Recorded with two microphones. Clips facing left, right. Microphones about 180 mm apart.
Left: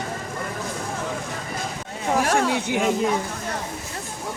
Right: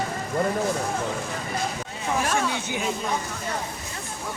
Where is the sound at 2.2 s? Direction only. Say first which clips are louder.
Left 5 dB; 75° left (ahead or behind).